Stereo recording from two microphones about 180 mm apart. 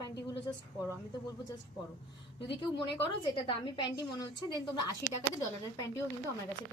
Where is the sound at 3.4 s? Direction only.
25° left (ahead or behind).